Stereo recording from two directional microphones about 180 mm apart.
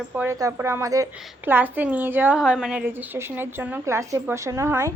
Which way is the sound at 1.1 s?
10° right (ahead or behind).